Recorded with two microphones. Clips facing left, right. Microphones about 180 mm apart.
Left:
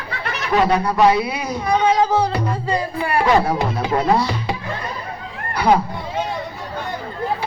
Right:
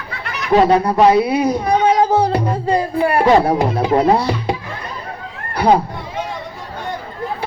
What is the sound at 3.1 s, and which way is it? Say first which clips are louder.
Speech: right 3 dB; 35° right (ahead or behind).